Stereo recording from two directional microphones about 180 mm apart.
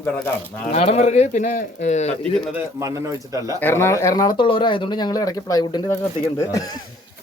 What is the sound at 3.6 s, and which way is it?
Speech, 15° left (ahead or behind).